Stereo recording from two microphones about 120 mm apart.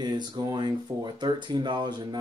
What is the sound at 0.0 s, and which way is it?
Speech, 35° right (ahead or behind).